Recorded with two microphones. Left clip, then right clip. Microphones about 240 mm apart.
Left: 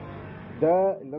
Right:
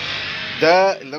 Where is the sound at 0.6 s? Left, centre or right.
Centre.